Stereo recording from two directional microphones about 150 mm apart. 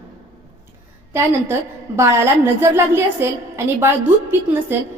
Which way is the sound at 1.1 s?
15° right (ahead or behind).